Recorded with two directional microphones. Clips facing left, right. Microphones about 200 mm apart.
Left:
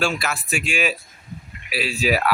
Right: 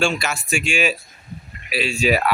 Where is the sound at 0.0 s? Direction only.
5° left (ahead or behind).